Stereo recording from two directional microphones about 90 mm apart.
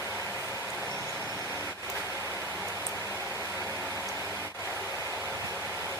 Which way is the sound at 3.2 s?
25° left (ahead or behind).